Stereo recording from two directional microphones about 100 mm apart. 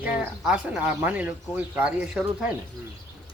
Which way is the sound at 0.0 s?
15° right (ahead or behind).